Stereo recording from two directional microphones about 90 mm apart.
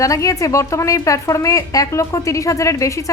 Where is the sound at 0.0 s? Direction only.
40° left (ahead or behind).